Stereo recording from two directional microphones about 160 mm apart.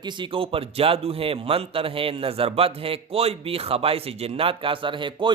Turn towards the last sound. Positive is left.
turn(degrees=-30)  # may be behind; listen again after turning